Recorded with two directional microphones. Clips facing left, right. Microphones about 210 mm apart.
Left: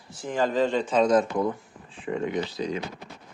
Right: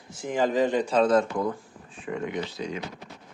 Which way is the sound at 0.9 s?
15° left (ahead or behind).